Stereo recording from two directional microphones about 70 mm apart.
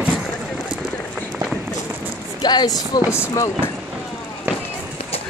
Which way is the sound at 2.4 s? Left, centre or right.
Left.